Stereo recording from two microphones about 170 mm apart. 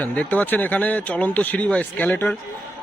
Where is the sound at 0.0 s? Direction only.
10° left (ahead or behind).